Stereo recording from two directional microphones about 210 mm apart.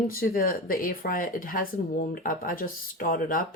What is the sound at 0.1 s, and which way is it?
Speech, 45° left (ahead or behind).